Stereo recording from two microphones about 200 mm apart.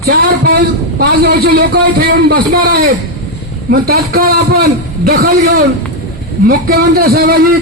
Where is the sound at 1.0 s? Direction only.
50° right (ahead or behind).